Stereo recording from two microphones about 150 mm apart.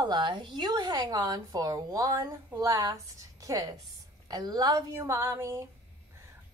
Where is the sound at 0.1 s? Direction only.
30° right (ahead or behind).